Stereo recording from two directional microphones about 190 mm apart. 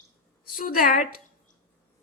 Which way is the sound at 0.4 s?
50° left (ahead or behind).